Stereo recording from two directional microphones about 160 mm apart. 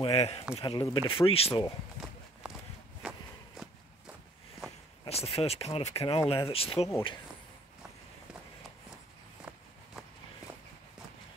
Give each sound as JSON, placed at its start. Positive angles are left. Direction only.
{"t": 0.0, "sound": "speech", "side_deg": 40}
{"t": 0.7, "sound": "speech", "side_deg": 25}
{"t": 3.0, "sound": "walk", "side_deg": -5}
{"t": 5.0, "sound": "speech", "side_deg": 40}